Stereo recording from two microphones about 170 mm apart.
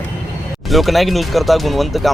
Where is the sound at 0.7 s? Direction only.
Centre (ahead or behind).